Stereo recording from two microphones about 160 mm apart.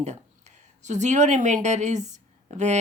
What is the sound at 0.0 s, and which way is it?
Speech, 45° right (ahead or behind).